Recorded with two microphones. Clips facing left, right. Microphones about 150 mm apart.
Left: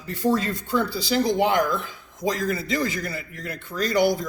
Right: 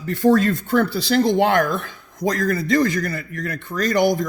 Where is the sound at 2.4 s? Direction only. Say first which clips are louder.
Right 6 dB; 50° right (ahead or behind).